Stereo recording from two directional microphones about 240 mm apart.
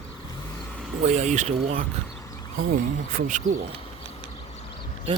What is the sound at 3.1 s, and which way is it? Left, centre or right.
Speech, right.